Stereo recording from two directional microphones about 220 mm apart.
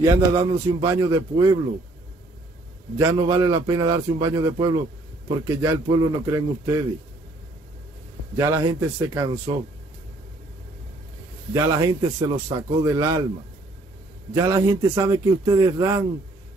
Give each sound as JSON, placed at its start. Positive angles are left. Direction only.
{"t": 0.0, "sound": "a man's voice", "side_deg": -15}
{"t": 3.0, "sound": "a man's voice", "side_deg": -20}
{"t": 8.4, "sound": "a man's voice", "side_deg": -15}
{"t": 11.5, "sound": "a man's voice", "side_deg": -15}
{"t": 14.3, "sound": "a man's voice", "side_deg": -15}